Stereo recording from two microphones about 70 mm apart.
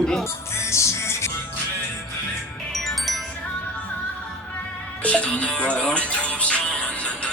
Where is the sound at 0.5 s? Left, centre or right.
Left.